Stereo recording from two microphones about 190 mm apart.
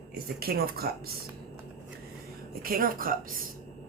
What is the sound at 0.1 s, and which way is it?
Speech, 50° right (ahead or behind).